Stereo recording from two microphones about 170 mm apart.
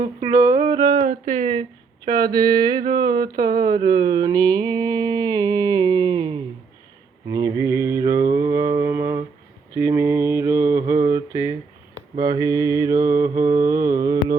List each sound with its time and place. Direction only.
0.2 s music: 20° right (ahead or behind)
1.2 s speech: 40° right (ahead or behind)
2.0 s a sound: 25° right (ahead or behind)
7.3 s mantra: 20° right (ahead or behind)